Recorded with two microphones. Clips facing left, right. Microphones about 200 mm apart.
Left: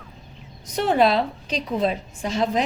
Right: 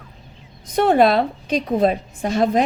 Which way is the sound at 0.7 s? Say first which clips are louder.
Right 4 dB; 55° right (ahead or behind).